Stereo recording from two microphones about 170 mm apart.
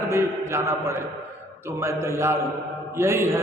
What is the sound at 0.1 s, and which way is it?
Speech, 15° right (ahead or behind).